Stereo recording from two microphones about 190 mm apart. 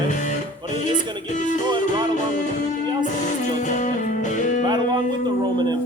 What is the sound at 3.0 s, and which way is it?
Music, 40° left (ahead or behind).